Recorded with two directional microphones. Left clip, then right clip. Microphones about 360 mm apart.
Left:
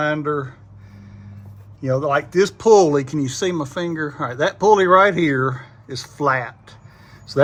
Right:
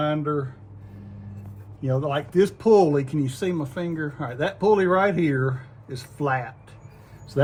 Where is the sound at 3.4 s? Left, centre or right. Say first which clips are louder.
Left 8 dB; left.